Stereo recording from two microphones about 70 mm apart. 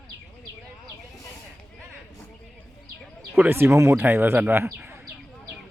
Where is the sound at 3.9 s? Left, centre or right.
Right.